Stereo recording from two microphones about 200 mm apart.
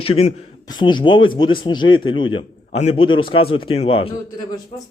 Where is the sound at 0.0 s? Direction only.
30° left (ahead or behind).